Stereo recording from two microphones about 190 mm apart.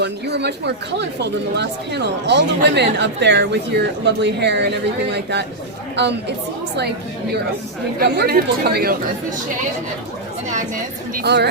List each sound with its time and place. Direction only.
0.0 s speech: 65° right (ahead or behind)
7.9 s speech: 60° right (ahead or behind)
11.1 s speech: 55° right (ahead or behind)